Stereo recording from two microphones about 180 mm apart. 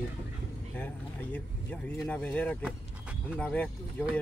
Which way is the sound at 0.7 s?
10° left (ahead or behind).